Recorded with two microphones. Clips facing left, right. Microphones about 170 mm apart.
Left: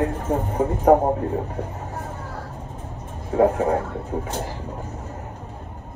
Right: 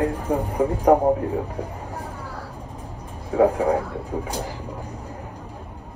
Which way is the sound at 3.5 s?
15° right (ahead or behind).